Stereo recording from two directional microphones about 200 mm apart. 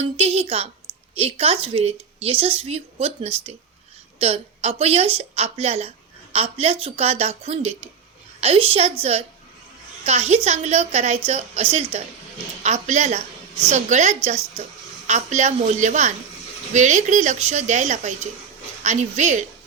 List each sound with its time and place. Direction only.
0.0 s a woman's voice: 30° right (ahead or behind)